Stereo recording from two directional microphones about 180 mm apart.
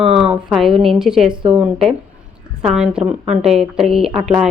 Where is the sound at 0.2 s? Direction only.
5° right (ahead or behind).